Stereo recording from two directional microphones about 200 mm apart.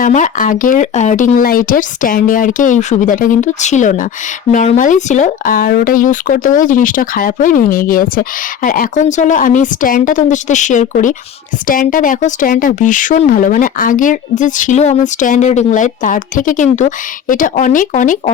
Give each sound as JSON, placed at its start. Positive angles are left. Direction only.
{"t": 0.0, "sound": "speech", "side_deg": 40}